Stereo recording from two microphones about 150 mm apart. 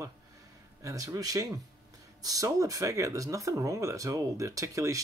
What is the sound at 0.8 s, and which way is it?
Speech, 25° right (ahead or behind).